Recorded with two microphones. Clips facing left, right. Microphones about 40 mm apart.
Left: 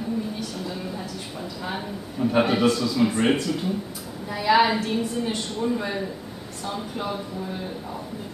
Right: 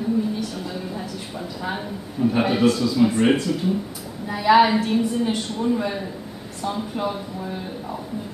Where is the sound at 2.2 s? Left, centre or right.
Centre.